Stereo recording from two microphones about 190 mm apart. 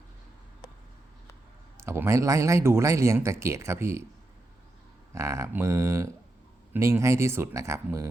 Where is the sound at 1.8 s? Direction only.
15° right (ahead or behind).